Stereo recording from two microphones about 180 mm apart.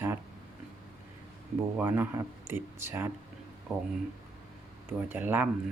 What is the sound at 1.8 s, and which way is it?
Speech, 10° right (ahead or behind).